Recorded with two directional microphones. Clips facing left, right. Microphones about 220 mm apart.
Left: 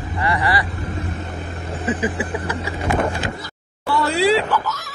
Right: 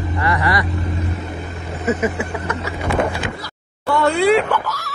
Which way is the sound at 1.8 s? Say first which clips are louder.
Right 3 dB; 30° left (ahead or behind).